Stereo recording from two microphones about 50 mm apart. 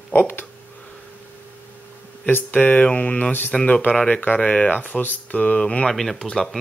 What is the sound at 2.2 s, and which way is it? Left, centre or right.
Speech, left.